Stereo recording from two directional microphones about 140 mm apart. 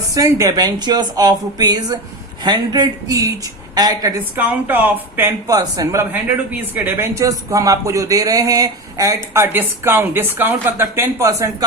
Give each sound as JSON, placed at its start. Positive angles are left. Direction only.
{"t": 0.1, "sound": "speech", "side_deg": -25}
{"t": 4.4, "sound": "speech", "side_deg": -10}